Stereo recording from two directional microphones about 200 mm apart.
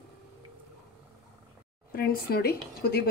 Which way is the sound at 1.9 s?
50° left (ahead or behind).